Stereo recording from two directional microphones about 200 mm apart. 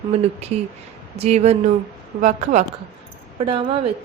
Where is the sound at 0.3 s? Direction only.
30° right (ahead or behind).